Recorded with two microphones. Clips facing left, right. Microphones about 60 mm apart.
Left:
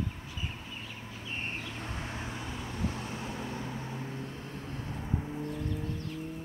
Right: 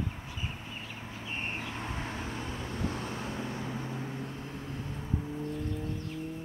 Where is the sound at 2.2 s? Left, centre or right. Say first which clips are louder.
Right 2 dB; centre.